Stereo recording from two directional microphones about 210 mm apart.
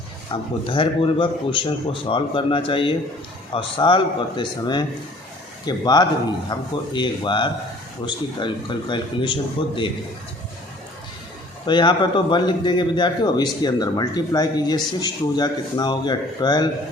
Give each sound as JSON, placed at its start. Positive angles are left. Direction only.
{"t": 0.3, "sound": "a man's voice", "side_deg": 25}
{"t": 11.6, "sound": "a man's voice", "side_deg": 20}